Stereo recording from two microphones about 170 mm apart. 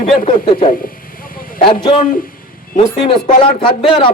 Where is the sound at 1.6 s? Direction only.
30° left (ahead or behind).